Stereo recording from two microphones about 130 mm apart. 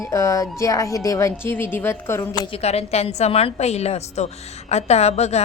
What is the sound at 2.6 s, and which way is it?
A woman's voice, 55° left (ahead or behind).